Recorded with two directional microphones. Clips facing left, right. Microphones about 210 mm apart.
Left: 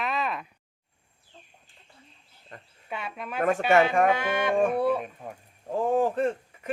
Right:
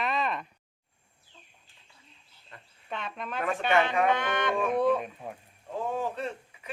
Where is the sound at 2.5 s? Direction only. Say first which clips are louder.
Left 5 dB; 45° left (ahead or behind).